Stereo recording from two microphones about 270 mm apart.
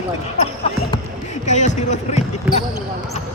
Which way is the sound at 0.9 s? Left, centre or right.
Left.